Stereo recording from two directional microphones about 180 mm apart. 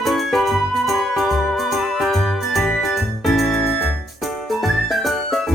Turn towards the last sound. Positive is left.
turn(degrees=0)  # may be behind; listen again after turning